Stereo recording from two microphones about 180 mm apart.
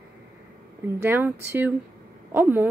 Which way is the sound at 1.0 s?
10° right (ahead or behind).